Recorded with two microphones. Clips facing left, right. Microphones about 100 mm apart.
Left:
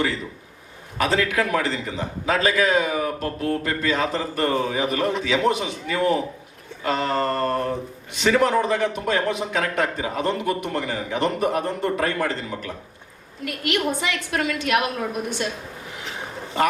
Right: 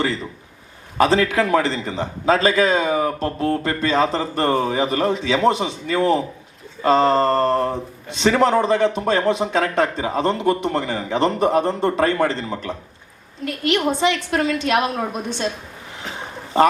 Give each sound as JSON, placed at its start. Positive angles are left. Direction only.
{"t": 0.9, "sound": "a man's voice", "side_deg": -30}